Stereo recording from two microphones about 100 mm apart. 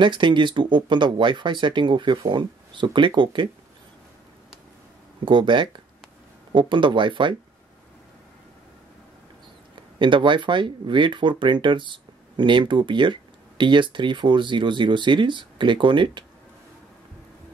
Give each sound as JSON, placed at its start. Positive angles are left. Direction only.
{"t": 0.0, "sound": "speech", "side_deg": -55}
{"t": 5.2, "sound": "speech", "side_deg": -50}
{"t": 9.9, "sound": "speech", "side_deg": -55}